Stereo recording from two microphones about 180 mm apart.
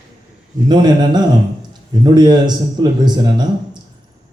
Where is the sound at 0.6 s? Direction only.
25° right (ahead or behind).